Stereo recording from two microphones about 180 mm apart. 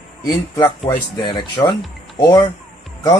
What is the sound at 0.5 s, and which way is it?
A man's voice, 25° left (ahead or behind).